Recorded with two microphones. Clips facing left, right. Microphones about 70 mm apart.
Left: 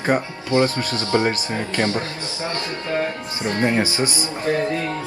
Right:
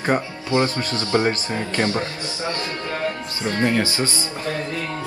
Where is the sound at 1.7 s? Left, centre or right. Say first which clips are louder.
Even; right.